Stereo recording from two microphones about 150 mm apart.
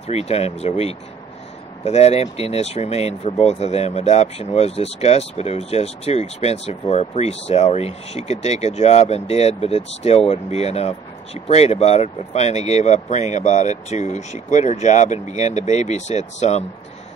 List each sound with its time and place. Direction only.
0.0 s speech: 45° left (ahead or behind)